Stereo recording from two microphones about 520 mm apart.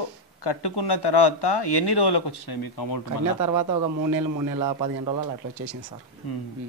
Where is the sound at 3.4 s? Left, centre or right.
Right.